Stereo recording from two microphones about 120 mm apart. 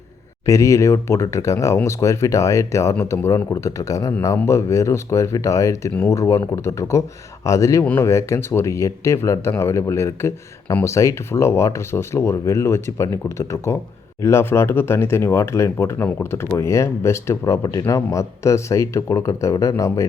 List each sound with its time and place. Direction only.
0.4 s speech: 25° left (ahead or behind)